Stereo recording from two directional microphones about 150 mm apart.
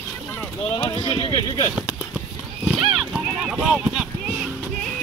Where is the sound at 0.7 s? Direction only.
30° left (ahead or behind).